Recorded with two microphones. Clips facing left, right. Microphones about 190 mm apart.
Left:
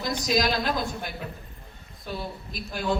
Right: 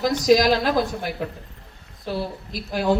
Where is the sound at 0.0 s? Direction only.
85° right.